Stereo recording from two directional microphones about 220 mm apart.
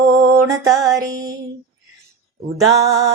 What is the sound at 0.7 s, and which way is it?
Mantra, 15° right (ahead or behind).